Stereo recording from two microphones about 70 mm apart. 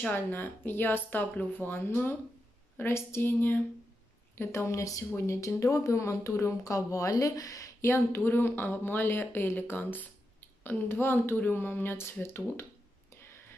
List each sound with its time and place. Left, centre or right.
0.1 s speech: left
4.4 s speech: left
7.8 s speech: left